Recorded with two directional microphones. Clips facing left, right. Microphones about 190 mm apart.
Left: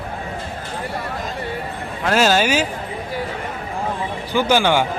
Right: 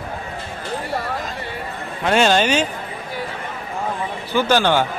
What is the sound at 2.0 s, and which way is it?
Speech, 5° left (ahead or behind).